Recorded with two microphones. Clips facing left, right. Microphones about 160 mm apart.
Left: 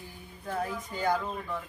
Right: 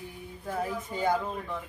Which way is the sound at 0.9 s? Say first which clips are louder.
Right 1 dB; 20° right (ahead or behind).